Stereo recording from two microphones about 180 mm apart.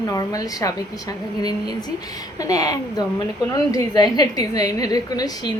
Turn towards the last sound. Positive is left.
turn(degrees=20)  # may be behind; listen again after turning